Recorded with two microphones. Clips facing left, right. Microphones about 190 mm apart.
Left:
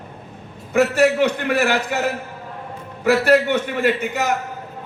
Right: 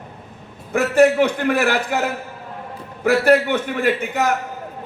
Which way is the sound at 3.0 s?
55° right (ahead or behind).